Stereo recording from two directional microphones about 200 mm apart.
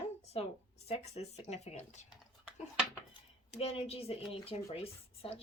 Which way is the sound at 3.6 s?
30° left (ahead or behind).